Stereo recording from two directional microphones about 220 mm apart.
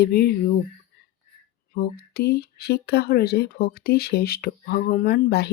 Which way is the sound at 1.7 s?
45° left (ahead or behind).